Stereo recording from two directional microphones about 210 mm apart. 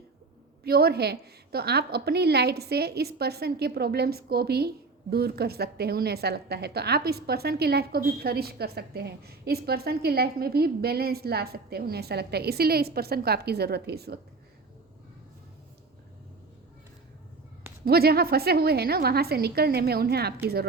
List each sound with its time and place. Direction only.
0.6 s a woman's voice: 50° right (ahead or behind)
17.8 s a woman's voice: 45° right (ahead or behind)